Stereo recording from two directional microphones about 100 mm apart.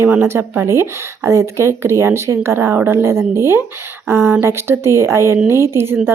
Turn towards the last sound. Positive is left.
turn(degrees=-25)  # may be behind; listen again after turning